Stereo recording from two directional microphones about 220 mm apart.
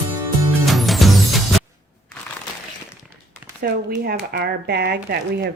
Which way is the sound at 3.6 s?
45° right (ahead or behind).